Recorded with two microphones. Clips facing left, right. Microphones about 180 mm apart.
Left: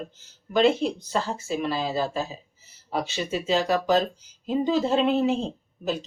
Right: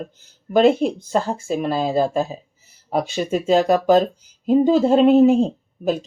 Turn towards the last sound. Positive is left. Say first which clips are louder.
# right 7 dB
turn(degrees=-45)  # may be behind; listen again after turning